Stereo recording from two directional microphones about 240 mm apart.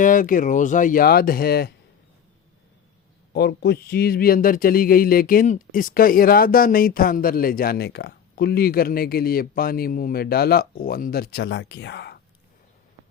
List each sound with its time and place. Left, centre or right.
0.0 s speech: left
3.3 s speech: left